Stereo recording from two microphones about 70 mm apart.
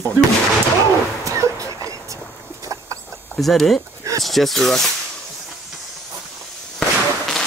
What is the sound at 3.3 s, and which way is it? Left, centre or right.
Speech, centre.